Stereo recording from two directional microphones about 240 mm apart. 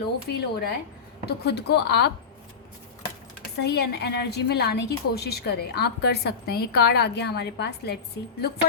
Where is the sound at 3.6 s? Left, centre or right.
Left.